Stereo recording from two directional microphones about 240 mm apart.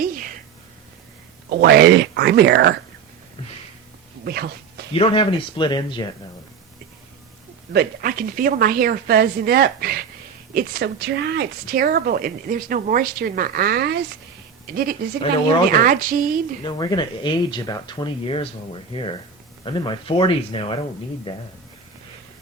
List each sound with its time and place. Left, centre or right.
0.0 s a sound: right
1.5 s speech: right
4.2 s a sound: right
4.9 s speech: left
7.7 s speech: right
16.6 s speech: centre